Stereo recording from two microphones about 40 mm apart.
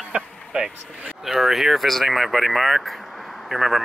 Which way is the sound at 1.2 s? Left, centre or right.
Centre.